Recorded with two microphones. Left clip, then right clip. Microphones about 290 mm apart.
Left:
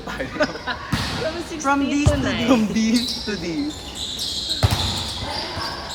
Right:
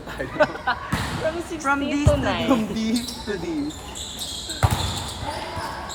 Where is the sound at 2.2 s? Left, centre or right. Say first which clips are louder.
Even; centre.